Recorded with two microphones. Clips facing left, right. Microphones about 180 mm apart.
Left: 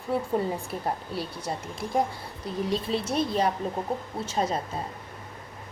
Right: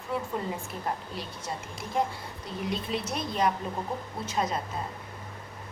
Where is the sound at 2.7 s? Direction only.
30° left (ahead or behind).